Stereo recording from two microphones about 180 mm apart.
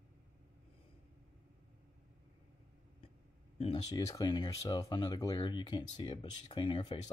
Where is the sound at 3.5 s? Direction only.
30° left (ahead or behind).